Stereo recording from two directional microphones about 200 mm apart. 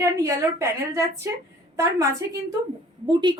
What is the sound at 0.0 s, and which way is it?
A woman's voice, 15° right (ahead or behind).